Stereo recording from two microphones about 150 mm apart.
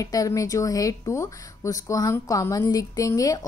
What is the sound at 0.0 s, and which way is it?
Speech, 25° left (ahead or behind).